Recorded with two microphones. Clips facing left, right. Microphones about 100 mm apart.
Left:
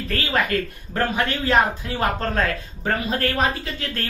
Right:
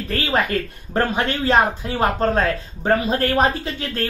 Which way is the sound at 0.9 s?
25° right (ahead or behind).